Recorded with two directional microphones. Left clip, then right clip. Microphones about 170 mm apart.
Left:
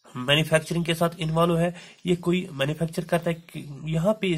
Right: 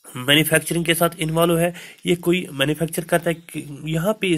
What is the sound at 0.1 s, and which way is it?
Speech, 20° right (ahead or behind).